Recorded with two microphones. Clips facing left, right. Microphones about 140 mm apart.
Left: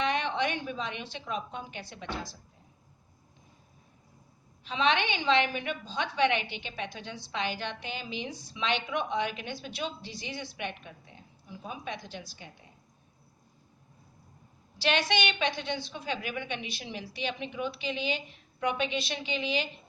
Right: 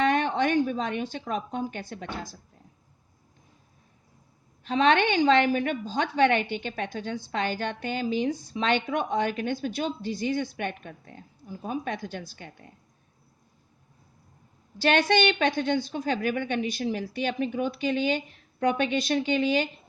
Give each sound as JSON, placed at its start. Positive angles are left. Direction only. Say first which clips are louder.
{"t": 0.0, "sound": "a woman's voice", "louder": "right 5 dB", "side_deg": -50}
{"t": 4.6, "sound": "a woman's voice", "louder": "right 6 dB", "side_deg": -50}
{"t": 14.8, "sound": "a woman's voice", "louder": "right 6 dB", "side_deg": -50}